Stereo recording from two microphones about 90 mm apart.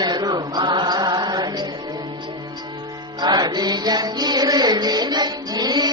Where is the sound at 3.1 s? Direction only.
50° right (ahead or behind).